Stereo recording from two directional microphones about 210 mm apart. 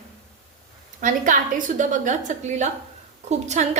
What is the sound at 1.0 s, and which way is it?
A woman's voice, 40° right (ahead or behind).